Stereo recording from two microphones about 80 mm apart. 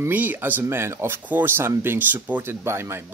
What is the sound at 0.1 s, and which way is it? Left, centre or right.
Speech, right.